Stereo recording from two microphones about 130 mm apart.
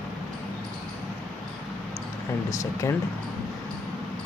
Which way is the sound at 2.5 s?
25° left (ahead or behind).